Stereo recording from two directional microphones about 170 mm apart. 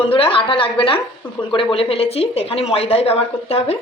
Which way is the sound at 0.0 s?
35° left (ahead or behind).